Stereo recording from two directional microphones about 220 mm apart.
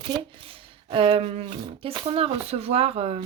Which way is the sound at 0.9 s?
25° right (ahead or behind).